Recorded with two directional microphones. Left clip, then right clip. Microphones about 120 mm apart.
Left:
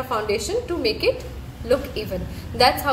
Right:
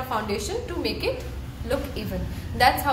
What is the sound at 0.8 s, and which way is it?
A woman's voice, 35° left (ahead or behind).